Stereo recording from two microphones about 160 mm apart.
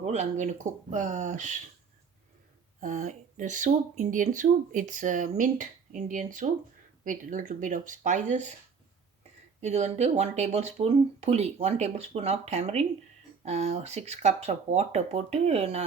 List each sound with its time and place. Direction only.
0.0 s speech: 45° right (ahead or behind)
2.8 s speech: 50° right (ahead or behind)
9.6 s speech: 45° right (ahead or behind)